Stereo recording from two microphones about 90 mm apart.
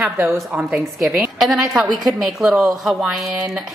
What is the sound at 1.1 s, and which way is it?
A woman's voice, centre (ahead or behind).